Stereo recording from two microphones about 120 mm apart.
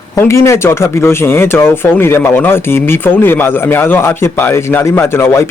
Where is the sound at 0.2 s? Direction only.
25° left (ahead or behind).